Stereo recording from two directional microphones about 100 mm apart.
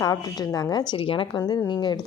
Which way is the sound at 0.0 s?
35° left (ahead or behind).